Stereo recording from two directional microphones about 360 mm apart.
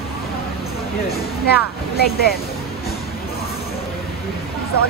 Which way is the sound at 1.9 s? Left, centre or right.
Left.